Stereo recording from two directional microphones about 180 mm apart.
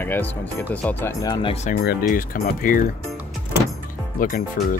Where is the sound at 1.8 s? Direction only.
55° left (ahead or behind).